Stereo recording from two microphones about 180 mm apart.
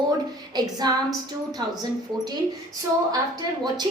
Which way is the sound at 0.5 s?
20° right (ahead or behind).